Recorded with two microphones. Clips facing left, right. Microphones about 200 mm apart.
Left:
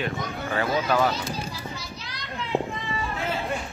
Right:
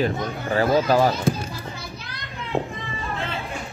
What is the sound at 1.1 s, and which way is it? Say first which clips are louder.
Speech: right 7 dB; 55° right (ahead or behind).